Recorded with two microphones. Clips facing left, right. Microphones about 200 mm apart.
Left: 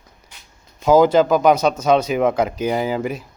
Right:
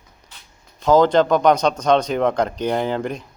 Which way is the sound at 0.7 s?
10° left (ahead or behind).